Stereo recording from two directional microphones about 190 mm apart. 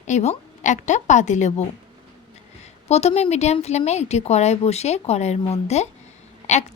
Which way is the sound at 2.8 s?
35° left (ahead or behind).